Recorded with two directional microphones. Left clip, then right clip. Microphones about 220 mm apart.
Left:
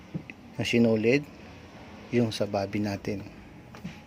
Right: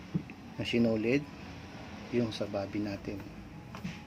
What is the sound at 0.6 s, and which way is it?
Speech, 30° left (ahead or behind).